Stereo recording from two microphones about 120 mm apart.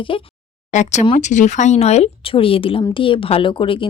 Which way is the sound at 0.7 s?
75° left (ahead or behind).